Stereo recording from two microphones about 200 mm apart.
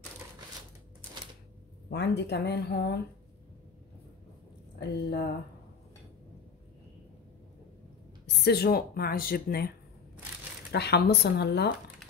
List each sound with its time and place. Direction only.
1.9 s speech: 55° left (ahead or behind)
4.7 s speech: 55° left (ahead or behind)
8.5 s speech: 50° left (ahead or behind)
10.7 s speech: 55° left (ahead or behind)